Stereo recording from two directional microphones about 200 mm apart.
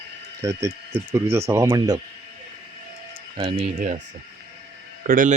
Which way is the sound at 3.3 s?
25° right (ahead or behind).